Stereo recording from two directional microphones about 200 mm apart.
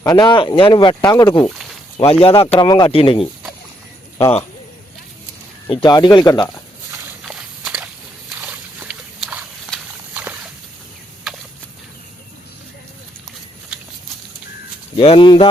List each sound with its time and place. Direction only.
0.0 s speech: 20° left (ahead or behind)
1.5 s speech: centre (ahead or behind)
2.0 s speech: 30° left (ahead or behind)
5.7 s speech: 20° left (ahead or behind)
7.3 s walk: 5° right (ahead or behind)
8.4 s a sound: 10° right (ahead or behind)
11.3 s a sound: centre (ahead or behind)
14.9 s speech: 25° left (ahead or behind)